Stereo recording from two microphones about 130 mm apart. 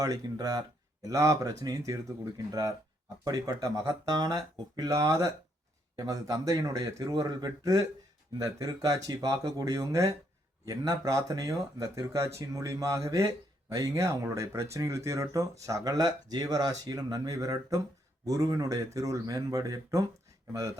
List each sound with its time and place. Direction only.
0.0 s speech: 30° right (ahead or behind)